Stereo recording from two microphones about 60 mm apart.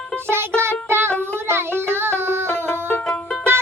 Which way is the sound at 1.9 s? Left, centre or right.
Right.